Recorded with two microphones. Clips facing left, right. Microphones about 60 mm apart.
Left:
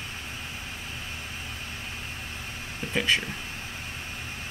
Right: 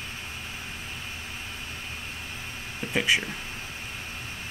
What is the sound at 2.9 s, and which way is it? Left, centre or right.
Speech, centre.